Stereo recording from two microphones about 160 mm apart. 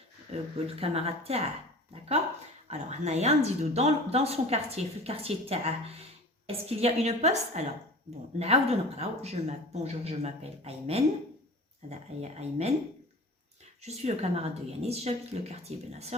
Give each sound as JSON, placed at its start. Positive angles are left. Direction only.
{"t": 0.3, "sound": "a woman's voice", "side_deg": -40}
{"t": 2.6, "sound": "a woman's voice", "side_deg": -45}
{"t": 13.8, "sound": "a woman's voice", "side_deg": -40}